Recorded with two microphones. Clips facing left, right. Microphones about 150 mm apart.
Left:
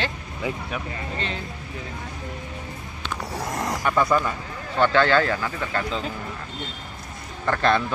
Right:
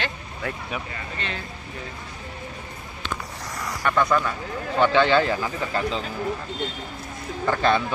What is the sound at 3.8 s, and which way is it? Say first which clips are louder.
Speech: even; 10° left (ahead or behind).